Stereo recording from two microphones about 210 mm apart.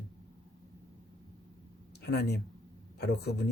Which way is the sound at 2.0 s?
50° left (ahead or behind).